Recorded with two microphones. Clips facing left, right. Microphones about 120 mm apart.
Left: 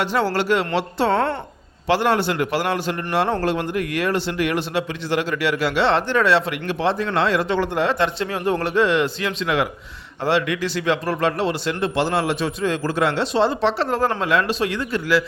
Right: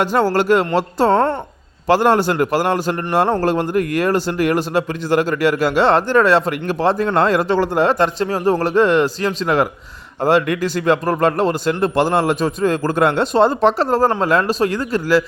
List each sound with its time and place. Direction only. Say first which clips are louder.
0.0 s speech: right 5 dB; 45° right (ahead or behind)